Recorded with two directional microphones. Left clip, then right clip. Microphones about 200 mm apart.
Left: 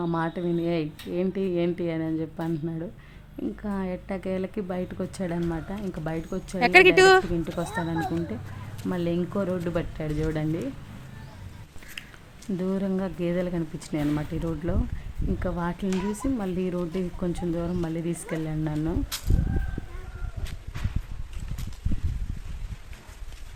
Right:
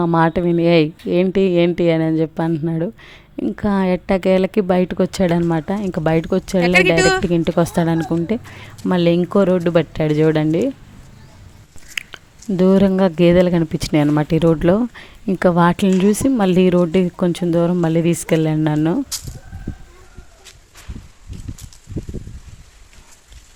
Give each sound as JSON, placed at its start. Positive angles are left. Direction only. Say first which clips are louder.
{"t": 0.0, "sound": "speech", "louder": "right 12 dB", "side_deg": -40}
{"t": 6.6, "sound": "a woman's voice", "louder": "right 2 dB", "side_deg": 5}
{"t": 7.3, "sound": "speech", "louder": "right 12 dB", "side_deg": -40}
{"t": 11.9, "sound": "a sound", "louder": "right 15 dB", "side_deg": -45}
{"t": 13.0, "sound": "speech", "louder": "right 16 dB", "side_deg": -50}